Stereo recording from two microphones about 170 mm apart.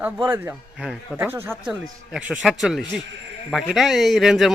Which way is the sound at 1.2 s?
15° right (ahead or behind).